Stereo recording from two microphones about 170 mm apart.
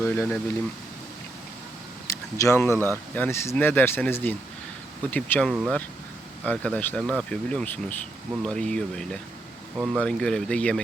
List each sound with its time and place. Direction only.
0.0 s speech: 15° left (ahead or behind)
2.0 s speech: 15° left (ahead or behind)
2.7 s speech: 15° right (ahead or behind)
3.2 s speech: 15° left (ahead or behind)
9.7 s speech: 5° right (ahead or behind)